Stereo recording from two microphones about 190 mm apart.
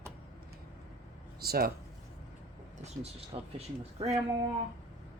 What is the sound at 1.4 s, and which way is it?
Speech, 55° right (ahead or behind).